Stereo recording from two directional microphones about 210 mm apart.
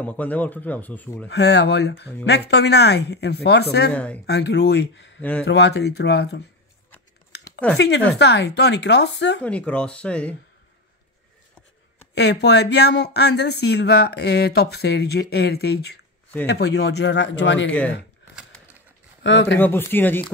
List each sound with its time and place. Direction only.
0.0 s speech: 5° left (ahead or behind)
1.3 s speech: 55° left (ahead or behind)
3.9 s speech: 5° left (ahead or behind)
4.3 s speech: 55° left (ahead or behind)
7.7 s a man's voice: 55° left (ahead or behind)
9.4 s speech: 5° left (ahead or behind)
12.2 s a man's voice: 55° left (ahead or behind)
17.6 s speech: 5° left (ahead or behind)
18.3 s a sound: 5° right (ahead or behind)
19.2 s speech: 60° left (ahead or behind)
19.6 s speech: 10° left (ahead or behind)